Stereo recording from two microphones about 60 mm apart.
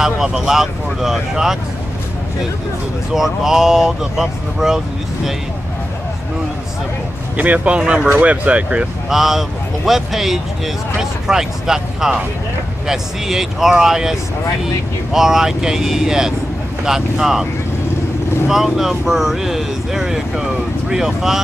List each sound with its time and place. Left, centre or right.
0.0 s speech: centre
3.1 s speech: centre
7.3 s speech: right
9.1 s a man's voice: centre
15.1 s speech: centre
18.5 s a man's voice: centre